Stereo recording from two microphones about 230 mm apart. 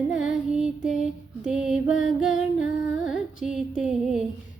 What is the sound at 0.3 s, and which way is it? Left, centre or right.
Music, centre.